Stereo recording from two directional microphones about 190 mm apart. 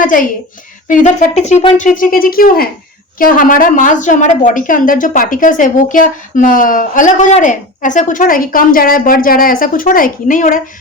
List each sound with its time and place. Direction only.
0.0 s a woman's voice: 45° left (ahead or behind)